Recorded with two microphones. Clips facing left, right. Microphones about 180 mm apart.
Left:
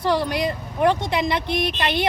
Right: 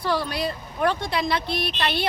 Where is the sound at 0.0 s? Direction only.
15° left (ahead or behind).